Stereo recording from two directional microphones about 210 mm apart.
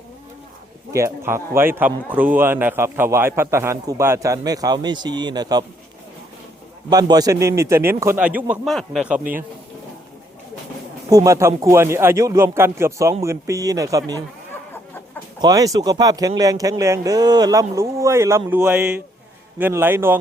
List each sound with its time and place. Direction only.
0.9 s speech: 15° right (ahead or behind)
6.9 s speech: 20° right (ahead or behind)
11.1 s speech: 15° right (ahead or behind)
15.4 s speech: 15° right (ahead or behind)